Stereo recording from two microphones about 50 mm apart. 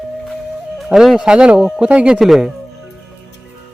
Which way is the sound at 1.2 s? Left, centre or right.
Centre.